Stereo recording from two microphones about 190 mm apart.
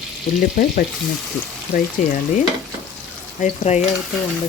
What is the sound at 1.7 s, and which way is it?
Speech, 55° left (ahead or behind).